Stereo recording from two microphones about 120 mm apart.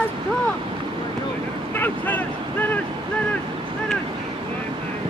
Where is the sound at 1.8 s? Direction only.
15° left (ahead or behind).